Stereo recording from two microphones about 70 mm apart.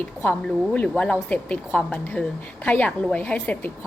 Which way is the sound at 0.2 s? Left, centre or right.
Centre.